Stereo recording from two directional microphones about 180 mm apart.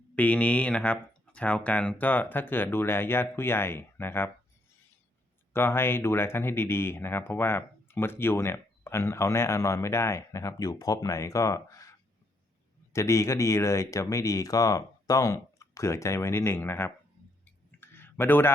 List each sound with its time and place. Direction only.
0.2 s speech: 10° left (ahead or behind)
5.5 s speech: 15° left (ahead or behind)
17.7 s a sound: 10° left (ahead or behind)